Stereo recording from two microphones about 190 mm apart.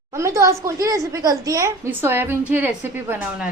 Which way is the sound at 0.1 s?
15° right (ahead or behind).